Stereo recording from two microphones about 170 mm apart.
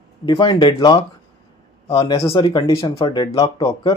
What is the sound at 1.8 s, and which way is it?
Speech, 35° left (ahead or behind).